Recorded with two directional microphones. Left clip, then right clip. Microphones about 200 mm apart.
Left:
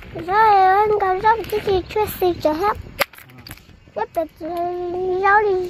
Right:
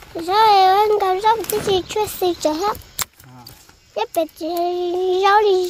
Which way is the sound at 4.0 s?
20° right (ahead or behind).